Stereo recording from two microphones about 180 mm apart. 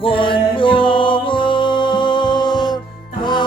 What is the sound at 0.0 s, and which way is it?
Music, 30° left (ahead or behind).